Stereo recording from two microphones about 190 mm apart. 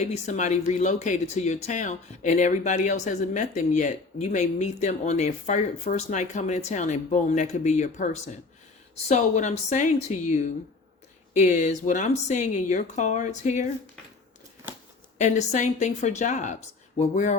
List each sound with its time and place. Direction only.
0.0 s speech: 35° left (ahead or behind)
15.2 s speech: 40° left (ahead or behind)